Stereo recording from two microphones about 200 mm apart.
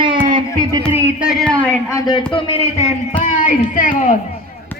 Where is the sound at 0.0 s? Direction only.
25° right (ahead or behind).